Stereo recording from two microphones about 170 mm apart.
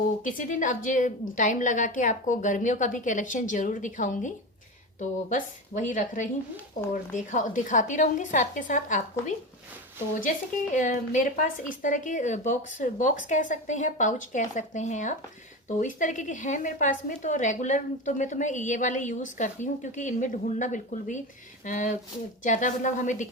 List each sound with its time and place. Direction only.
0.2 s a woman's voice: 50° left (ahead or behind)
10.8 s a woman's voice: 45° left (ahead or behind)